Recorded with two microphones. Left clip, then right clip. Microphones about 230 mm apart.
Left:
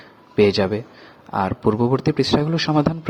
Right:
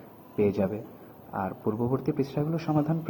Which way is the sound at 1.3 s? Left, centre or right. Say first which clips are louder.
Left 11 dB; left.